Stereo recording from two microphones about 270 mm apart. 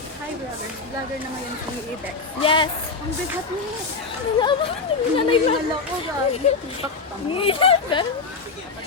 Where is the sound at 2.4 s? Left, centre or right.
Centre.